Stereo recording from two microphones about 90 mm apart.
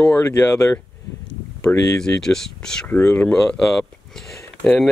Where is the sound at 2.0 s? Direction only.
5° left (ahead or behind).